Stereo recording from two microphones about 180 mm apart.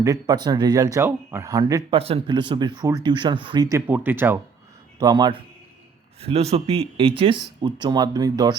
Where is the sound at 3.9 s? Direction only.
10° right (ahead or behind).